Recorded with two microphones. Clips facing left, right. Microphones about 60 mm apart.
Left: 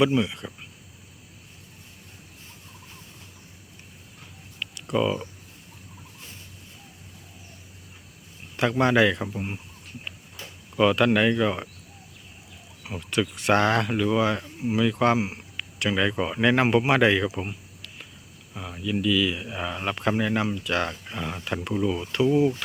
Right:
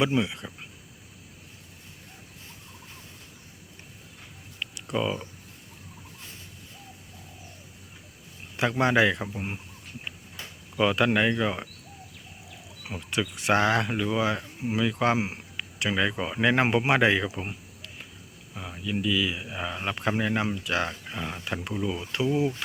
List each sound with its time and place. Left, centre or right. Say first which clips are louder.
0.0 s speech: left 3 dB; centre
4.9 s speech: left 4 dB; centre
8.5 s speech: left 2 dB; centre
9.1 s speech: left 3 dB; centre
10.8 s speech: left 3 dB; centre
13.0 s speech: left 4 dB; centre
15.5 s a sound: left 2 dB; centre
16.1 s speech: left 4 dB; centre
16.4 s speech: left 2 dB; centre
17.4 s a sound: left 1 dB; centre
18.5 s speech: left 2 dB; centre
18.8 s speech: left 3 dB; centre
20.1 s speech: left 2 dB; centre
22.1 s speech: left 5 dB; centre